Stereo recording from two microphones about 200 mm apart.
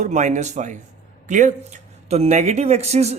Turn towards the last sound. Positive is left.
turn(degrees=-35)  # may be behind; listen again after turning